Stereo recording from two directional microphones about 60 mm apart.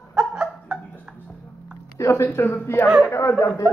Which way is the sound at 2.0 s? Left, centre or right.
Left.